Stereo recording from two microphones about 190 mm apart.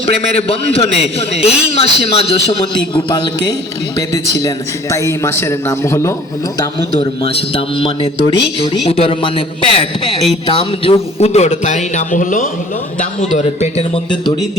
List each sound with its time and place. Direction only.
0.0 s a man's voice: 30° left (ahead or behind)
4.4 s speech: 15° left (ahead or behind)
6.6 s a man's voice: 30° left (ahead or behind)